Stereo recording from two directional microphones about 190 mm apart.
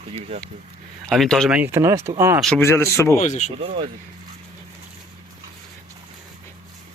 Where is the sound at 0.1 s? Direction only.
30° right (ahead or behind).